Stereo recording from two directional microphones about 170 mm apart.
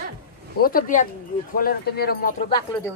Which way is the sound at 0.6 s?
55° left (ahead or behind).